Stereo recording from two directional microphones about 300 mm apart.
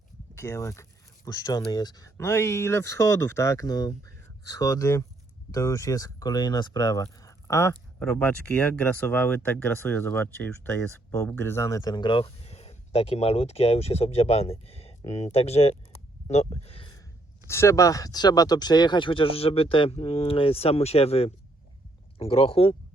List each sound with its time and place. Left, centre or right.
0.3 s speech: centre